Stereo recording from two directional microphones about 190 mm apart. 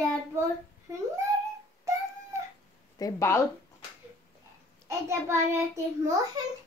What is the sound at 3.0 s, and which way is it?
Speech, 15° left (ahead or behind).